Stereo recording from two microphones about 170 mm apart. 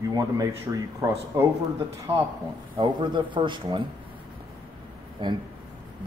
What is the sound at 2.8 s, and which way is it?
A man's voice, 25° right (ahead or behind).